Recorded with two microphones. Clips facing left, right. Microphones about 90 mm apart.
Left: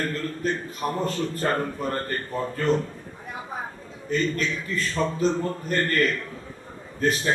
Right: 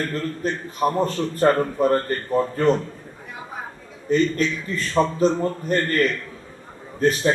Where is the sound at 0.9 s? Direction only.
40° right (ahead or behind).